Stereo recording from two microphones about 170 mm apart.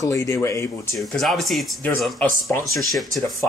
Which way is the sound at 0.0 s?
20° left (ahead or behind).